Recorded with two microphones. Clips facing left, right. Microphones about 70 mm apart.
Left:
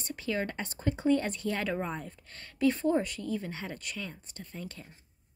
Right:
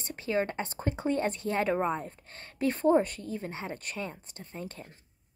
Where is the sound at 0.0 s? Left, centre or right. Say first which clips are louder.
Right 3 dB; right.